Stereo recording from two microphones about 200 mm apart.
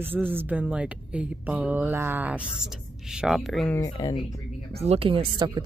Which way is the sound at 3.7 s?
15° left (ahead or behind).